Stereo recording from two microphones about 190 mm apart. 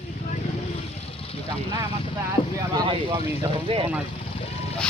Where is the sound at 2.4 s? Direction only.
25° left (ahead or behind).